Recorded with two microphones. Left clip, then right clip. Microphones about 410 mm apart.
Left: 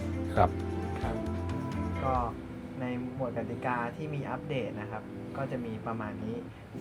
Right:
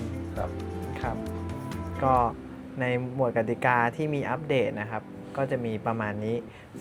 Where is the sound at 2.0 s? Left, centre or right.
Right.